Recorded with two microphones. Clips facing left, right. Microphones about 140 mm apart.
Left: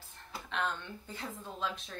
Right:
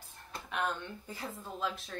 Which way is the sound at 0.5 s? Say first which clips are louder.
Right 1 dB; 10° right (ahead or behind).